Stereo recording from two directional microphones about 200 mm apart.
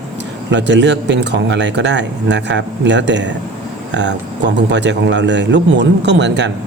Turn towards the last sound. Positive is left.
turn(degrees=-60)  # may be behind; listen again after turning